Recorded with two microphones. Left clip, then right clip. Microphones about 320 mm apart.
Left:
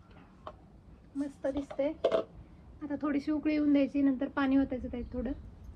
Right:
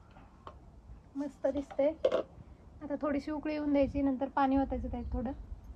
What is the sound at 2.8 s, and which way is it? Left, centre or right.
A woman's voice, right.